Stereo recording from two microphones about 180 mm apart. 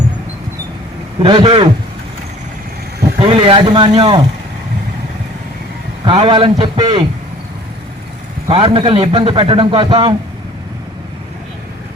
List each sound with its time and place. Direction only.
1.2 s a man's voice: 30° right (ahead or behind)
3.2 s a man's voice: 30° right (ahead or behind)
6.1 s a man's voice: 25° right (ahead or behind)
8.4 s a man's voice: 30° right (ahead or behind)